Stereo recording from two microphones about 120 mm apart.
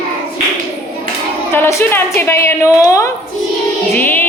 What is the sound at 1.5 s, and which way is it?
Speech, 20° left (ahead or behind).